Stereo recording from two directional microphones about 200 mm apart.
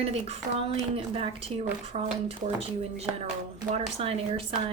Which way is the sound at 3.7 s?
30° right (ahead or behind).